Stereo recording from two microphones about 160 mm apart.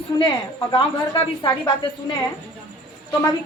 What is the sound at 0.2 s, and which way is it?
A woman's voice, 30° left (ahead or behind).